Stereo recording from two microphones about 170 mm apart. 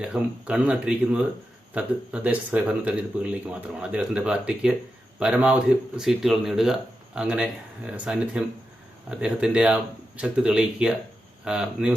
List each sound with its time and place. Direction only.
0.0 s speech: 5° right (ahead or behind)